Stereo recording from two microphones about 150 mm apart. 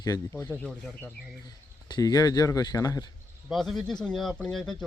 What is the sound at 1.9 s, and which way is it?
Speech, 25° left (ahead or behind).